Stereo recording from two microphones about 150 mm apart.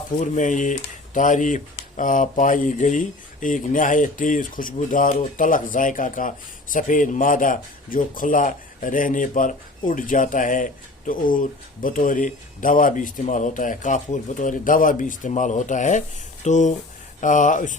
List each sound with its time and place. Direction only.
0.2 s speech: 55° left (ahead or behind)